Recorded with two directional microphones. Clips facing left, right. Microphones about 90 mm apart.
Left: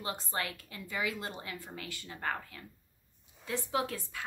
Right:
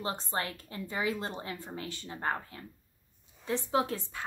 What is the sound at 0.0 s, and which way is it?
A woman's voice, 30° right (ahead or behind).